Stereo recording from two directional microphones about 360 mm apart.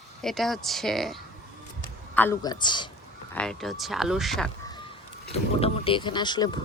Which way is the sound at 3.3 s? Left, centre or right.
Centre.